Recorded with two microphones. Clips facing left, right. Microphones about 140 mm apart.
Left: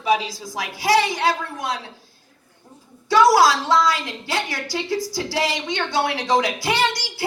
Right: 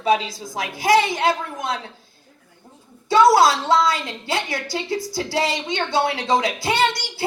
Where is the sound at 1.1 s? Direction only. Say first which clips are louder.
Right 1 dB; 20° right (ahead or behind).